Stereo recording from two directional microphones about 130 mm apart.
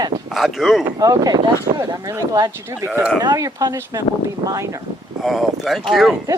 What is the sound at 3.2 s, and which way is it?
Speech, 30° right (ahead or behind).